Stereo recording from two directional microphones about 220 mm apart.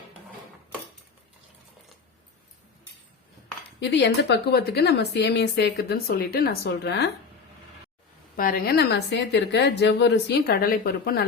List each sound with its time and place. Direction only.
3.8 s speech: 50° left (ahead or behind)
8.4 s speech: 40° left (ahead or behind)